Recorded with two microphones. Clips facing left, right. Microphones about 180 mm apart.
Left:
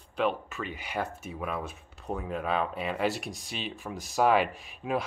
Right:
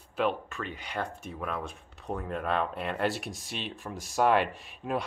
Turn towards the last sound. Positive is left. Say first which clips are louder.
# left 1 dB
turn(degrees=5)  # may be behind; listen again after turning